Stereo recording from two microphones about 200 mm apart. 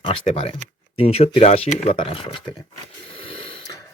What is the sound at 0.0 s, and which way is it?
Speech, 25° left (ahead or behind).